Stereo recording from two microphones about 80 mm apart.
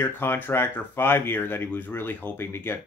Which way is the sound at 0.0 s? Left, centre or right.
Left.